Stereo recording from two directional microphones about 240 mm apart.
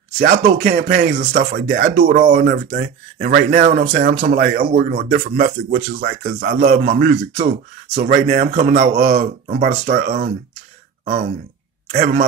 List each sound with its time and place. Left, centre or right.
0.5 s speech: right
11.9 s speech: right